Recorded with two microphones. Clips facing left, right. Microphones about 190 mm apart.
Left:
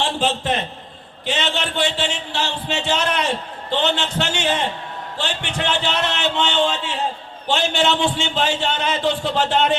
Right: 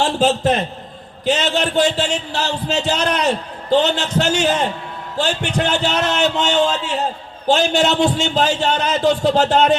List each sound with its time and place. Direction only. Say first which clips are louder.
0.0 s a man's voice: right 6 dB; 40° right (ahead or behind)